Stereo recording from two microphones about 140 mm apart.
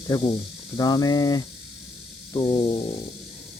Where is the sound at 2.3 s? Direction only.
35° left (ahead or behind).